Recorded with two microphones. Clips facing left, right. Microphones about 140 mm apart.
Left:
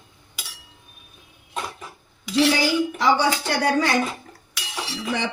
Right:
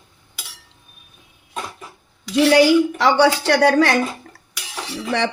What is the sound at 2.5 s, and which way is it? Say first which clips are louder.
Speech: right 8 dB; 70° right (ahead or behind).